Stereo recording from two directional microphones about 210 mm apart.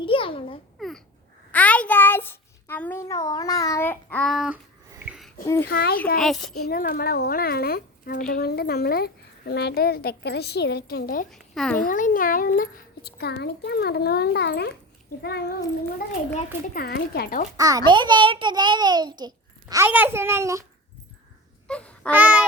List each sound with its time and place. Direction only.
0.0 s a sound: 25° left (ahead or behind)
0.8 s babbling: centre (ahead or behind)
1.5 s a sound: 5° left (ahead or behind)
5.6 s a child's voice: 45° left (ahead or behind)
6.1 s a child's voice: centre (ahead or behind)
6.7 s a child's voice: 45° left (ahead or behind)
11.3 s a woman's voice: centre (ahead or behind)
11.9 s a child's voice: 40° left (ahead or behind)
16.7 s a child's voice: 45° left (ahead or behind)
17.6 s a child's voice: 15° right (ahead or behind)
21.7 s a sound: 5° left (ahead or behind)
22.1 s a sound: 5° right (ahead or behind)